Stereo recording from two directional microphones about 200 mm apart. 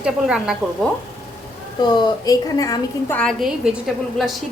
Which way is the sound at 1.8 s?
20° left (ahead or behind).